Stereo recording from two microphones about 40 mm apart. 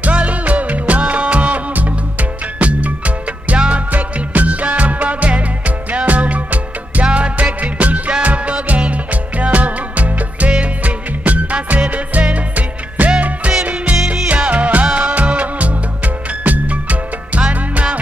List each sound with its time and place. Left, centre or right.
0.0 s music: right
3.9 s music: right
14.0 s music: right
14.3 s music: right